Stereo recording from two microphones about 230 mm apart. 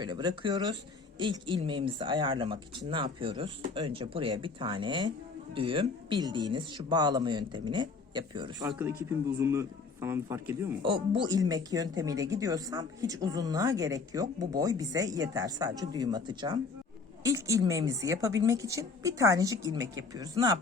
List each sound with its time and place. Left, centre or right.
0.0 s speech: centre
10.8 s speech: right